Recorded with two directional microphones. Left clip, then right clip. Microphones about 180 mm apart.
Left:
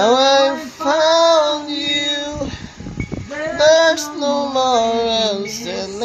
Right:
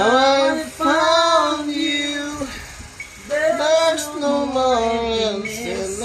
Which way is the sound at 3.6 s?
25° left (ahead or behind).